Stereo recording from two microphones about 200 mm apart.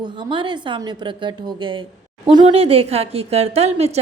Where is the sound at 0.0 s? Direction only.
25° right (ahead or behind).